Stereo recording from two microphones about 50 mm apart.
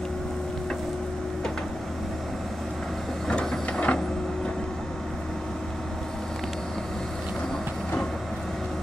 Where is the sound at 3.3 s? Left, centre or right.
Left.